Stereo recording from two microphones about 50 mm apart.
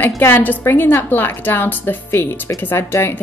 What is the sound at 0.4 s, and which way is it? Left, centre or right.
Speech, left.